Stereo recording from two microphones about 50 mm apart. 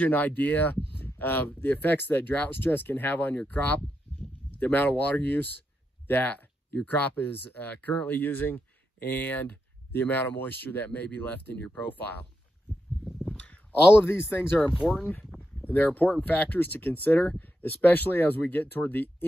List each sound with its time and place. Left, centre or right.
0.0 s speech: left
2.3 s speech: left
2.6 s speech: left
6.0 s a sound: left
6.9 s speech: left
13.0 s a sound: centre
13.9 s speech: left
15.6 s speech: left